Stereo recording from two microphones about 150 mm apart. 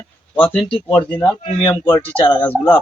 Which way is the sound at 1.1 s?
30° left (ahead or behind).